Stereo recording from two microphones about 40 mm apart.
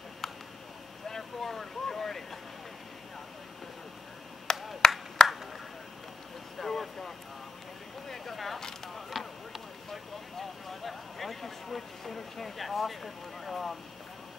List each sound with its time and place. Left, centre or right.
1.0 s vehicle: centre
4.5 s finger snapping: centre
6.6 s vehicle: centre
8.1 s single-lens reflex camera: centre
8.5 s a sound: centre
9.1 s a sound: centre